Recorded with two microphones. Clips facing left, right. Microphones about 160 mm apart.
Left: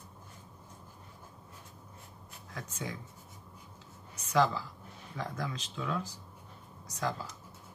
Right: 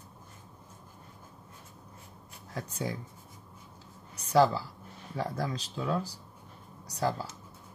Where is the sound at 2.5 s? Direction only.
35° right (ahead or behind).